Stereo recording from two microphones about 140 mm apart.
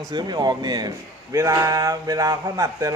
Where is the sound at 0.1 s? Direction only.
30° right (ahead or behind).